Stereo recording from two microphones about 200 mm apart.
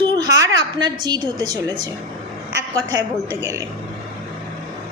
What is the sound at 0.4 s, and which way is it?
A woman's voice, 20° right (ahead or behind).